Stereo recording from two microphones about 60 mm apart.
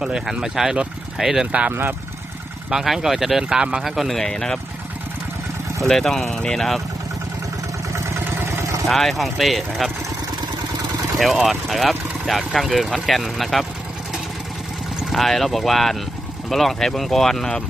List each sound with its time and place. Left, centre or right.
0.0 s speech: centre
1.7 s speech: right
2.6 s speech: centre
3.8 s speech: centre
5.8 s speech: centre
7.9 s vehicle: right
8.9 s speech: centre
11.2 s speech: centre
15.1 s speech: centre